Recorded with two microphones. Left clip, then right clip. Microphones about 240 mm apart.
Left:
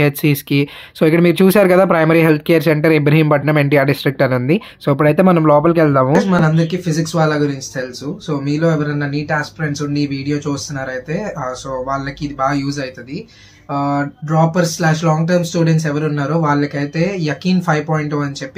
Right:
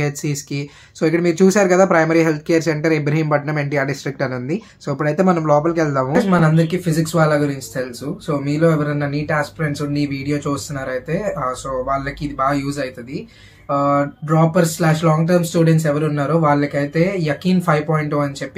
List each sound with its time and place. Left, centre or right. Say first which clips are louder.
0.0 s speech: left 8 dB; left
6.1 s speech: left 1 dB; centre